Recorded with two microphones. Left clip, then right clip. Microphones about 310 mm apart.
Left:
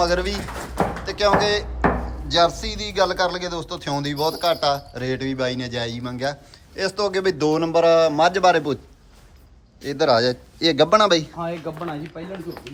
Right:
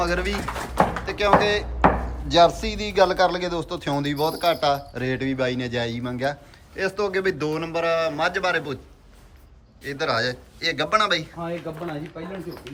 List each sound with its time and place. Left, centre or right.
0.0 s a man's voice: centre
9.8 s a man's voice: centre
11.3 s speech: left